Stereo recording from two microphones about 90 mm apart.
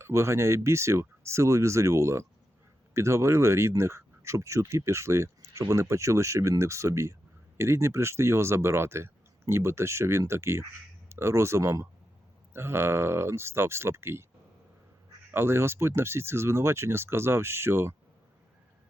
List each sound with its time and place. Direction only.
0.0 s speech: 30° right (ahead or behind)
15.3 s speech: 25° right (ahead or behind)